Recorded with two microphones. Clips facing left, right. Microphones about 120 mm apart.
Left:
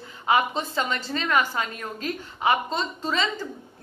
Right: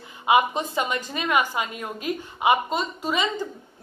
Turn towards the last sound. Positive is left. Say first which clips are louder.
# right 1 dB
turn(degrees=-15)  # may be behind; listen again after turning